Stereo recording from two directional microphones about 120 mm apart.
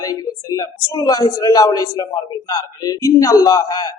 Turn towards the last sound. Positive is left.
turn(degrees=35)  # may be behind; listen again after turning